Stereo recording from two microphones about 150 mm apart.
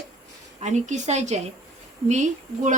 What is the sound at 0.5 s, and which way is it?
A woman's voice, 50° right (ahead or behind).